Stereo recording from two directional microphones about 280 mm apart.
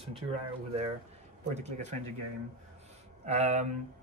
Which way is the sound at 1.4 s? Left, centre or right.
Right.